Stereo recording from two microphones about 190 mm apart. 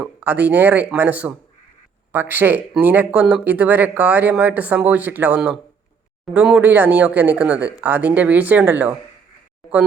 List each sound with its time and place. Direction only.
0.0 s speech: 5° right (ahead or behind)